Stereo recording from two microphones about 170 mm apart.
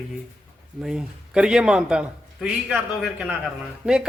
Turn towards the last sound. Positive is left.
turn(degrees=-5)  # may be behind; listen again after turning